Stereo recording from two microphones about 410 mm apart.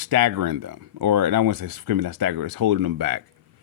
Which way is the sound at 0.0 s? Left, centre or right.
Right.